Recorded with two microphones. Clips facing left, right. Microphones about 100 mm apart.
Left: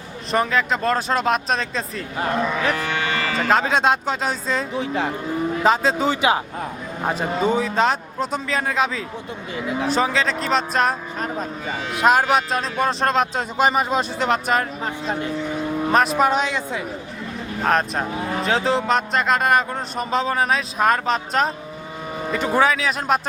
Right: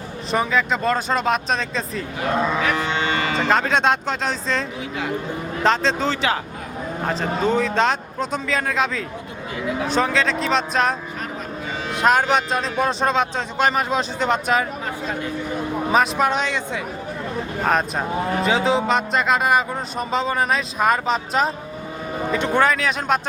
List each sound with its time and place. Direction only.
0.3 s speech: centre (ahead or behind)
2.3 s cattle: 20° right (ahead or behind)
3.3 s speech: centre (ahead or behind)
5.6 s speech: 5° left (ahead or behind)
15.9 s speech: centre (ahead or behind)